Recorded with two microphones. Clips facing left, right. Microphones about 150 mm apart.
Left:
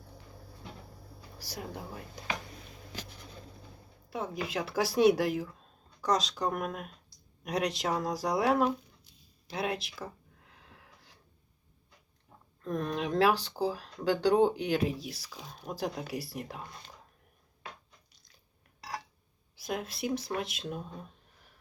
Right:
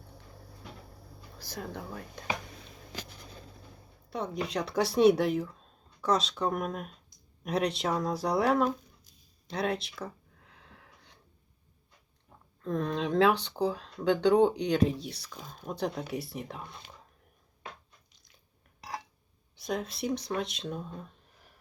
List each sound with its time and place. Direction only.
1.4 s speech: 10° left (ahead or behind)
4.1 s speech: 5° left (ahead or behind)
10.7 s a sound: 5° left (ahead or behind)
12.9 s speech: 5° left (ahead or behind)
18.8 s a sound: 20° right (ahead or behind)
19.5 s speech: centre (ahead or behind)